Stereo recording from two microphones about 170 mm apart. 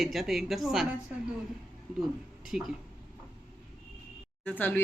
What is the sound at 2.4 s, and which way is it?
Speech, centre (ahead or behind).